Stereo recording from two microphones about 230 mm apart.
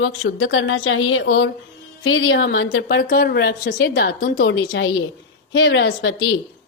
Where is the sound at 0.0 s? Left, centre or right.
Left.